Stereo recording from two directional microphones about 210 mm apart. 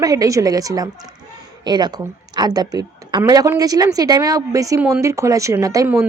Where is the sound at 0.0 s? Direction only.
15° right (ahead or behind).